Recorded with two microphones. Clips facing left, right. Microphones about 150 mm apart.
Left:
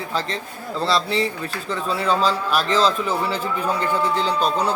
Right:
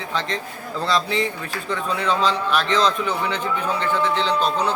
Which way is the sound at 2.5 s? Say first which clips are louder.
Even; 35° left (ahead or behind).